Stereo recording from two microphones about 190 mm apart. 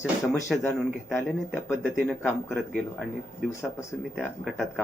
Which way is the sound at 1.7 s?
10° left (ahead or behind).